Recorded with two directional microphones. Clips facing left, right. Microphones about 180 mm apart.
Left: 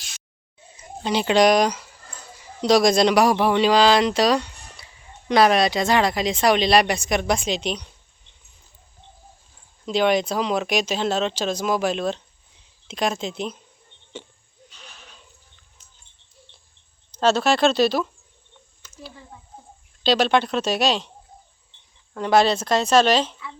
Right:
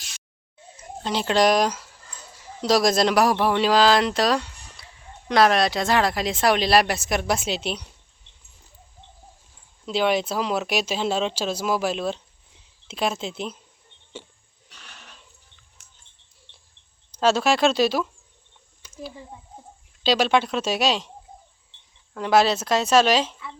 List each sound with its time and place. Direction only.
1.0 s speech: centre (ahead or behind)
9.8 s speech: 5° right (ahead or behind)
15.8 s a sound: 75° right (ahead or behind)
17.1 s speech: 10° right (ahead or behind)
18.8 s a sound: 10° right (ahead or behind)
20.1 s speech: 5° right (ahead or behind)
22.1 s speech: 5° right (ahead or behind)